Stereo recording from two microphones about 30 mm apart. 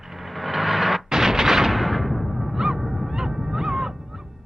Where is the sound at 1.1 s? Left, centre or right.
Centre.